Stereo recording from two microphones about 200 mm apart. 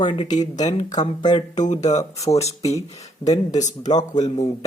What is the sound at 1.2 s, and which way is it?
Speech, 20° left (ahead or behind).